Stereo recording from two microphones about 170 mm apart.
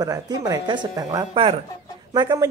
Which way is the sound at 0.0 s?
20° right (ahead or behind).